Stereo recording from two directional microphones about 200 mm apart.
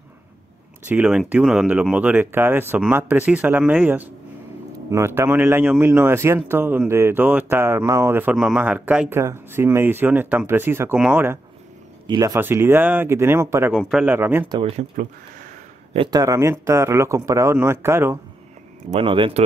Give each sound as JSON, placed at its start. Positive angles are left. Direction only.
{"t": 0.8, "sound": "speech", "side_deg": -5}
{"t": 13.7, "sound": "speech", "side_deg": 0}
{"t": 14.5, "sound": "speech", "side_deg": -30}
{"t": 18.9, "sound": "speech", "side_deg": -25}